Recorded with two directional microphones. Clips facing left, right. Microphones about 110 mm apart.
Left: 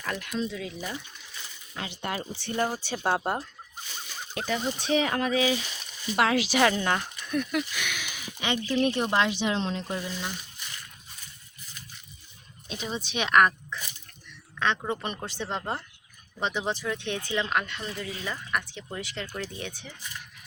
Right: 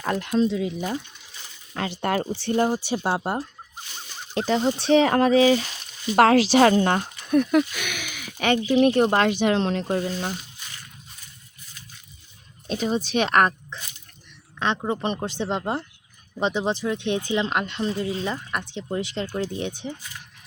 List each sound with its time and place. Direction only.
0.0 s speech: 35° right (ahead or behind)
0.4 s speech: 25° right (ahead or behind)
1.9 s speech: 45° right (ahead or behind)
2.3 s speech: 35° right (ahead or behind)
2.6 s speech: 15° right (ahead or behind)
4.4 s speech: 30° right (ahead or behind)
7.4 s speech: 55° right (ahead or behind)
9.8 s speech: 50° right (ahead or behind)
12.6 s speech: 40° right (ahead or behind)
13.7 s speech: 25° right (ahead or behind)